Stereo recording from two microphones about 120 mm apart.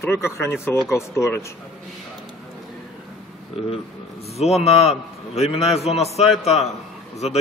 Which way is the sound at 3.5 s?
60° left (ahead or behind).